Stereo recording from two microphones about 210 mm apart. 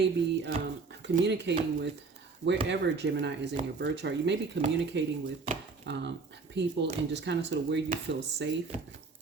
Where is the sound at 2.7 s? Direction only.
55° right (ahead or behind).